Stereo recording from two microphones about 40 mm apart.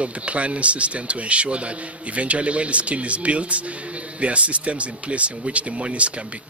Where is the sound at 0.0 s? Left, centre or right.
Right.